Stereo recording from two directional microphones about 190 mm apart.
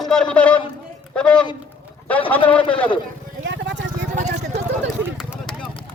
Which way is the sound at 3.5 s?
75° right (ahead or behind).